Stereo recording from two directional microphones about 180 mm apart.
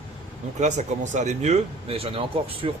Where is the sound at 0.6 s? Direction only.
40° right (ahead or behind).